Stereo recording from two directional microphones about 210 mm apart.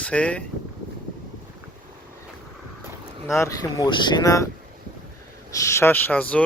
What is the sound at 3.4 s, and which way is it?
Speech, 15° left (ahead or behind).